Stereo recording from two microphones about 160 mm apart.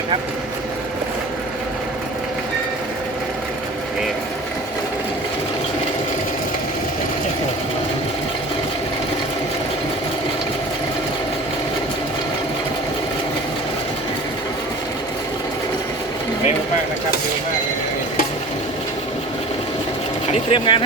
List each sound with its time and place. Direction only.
20.3 s sewing machine: 35° left (ahead or behind)